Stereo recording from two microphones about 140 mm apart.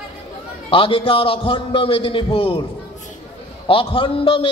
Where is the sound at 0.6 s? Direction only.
40° left (ahead or behind).